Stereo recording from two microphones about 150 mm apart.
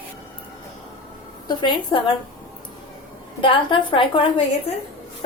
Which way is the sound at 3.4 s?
35° left (ahead or behind).